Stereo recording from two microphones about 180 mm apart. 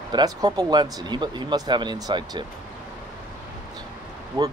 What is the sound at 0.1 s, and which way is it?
Speech, 20° right (ahead or behind).